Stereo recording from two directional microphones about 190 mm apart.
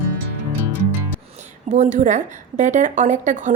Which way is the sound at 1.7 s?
40° right (ahead or behind).